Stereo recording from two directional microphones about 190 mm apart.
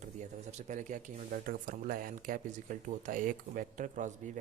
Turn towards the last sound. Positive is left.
turn(degrees=-40)  # may be behind; listen again after turning